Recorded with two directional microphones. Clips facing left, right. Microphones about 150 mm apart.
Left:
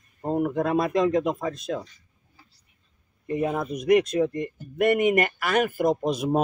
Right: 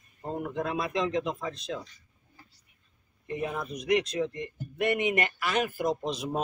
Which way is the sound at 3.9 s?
50° left (ahead or behind).